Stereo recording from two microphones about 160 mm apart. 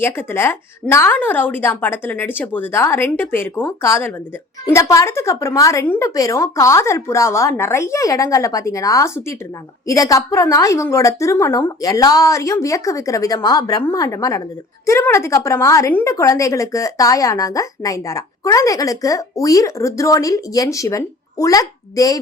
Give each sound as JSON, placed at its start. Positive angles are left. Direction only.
{"t": 0.0, "sound": "a woman's voice", "side_deg": 15}